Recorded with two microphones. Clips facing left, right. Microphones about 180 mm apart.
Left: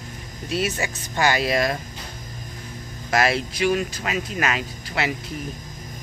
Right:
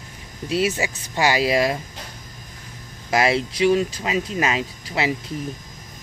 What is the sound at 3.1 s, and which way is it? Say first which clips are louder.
Speech: right 2 dB; 25° right (ahead or behind).